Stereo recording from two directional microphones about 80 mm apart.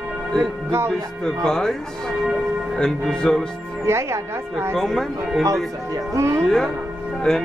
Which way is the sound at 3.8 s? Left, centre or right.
Right.